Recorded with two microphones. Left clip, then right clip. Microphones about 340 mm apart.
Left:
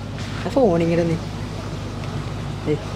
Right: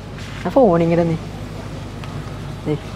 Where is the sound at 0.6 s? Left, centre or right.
Right.